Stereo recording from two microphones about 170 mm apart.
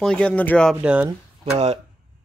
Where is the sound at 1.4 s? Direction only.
35° right (ahead or behind).